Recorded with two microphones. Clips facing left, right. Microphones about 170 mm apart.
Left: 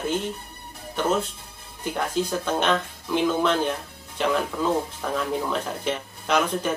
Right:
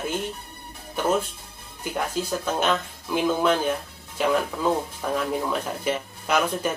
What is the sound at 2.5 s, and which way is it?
Speech, 10° right (ahead or behind).